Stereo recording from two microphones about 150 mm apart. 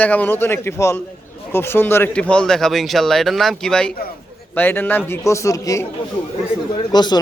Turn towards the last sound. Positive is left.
turn(degrees=30)  # may be behind; listen again after turning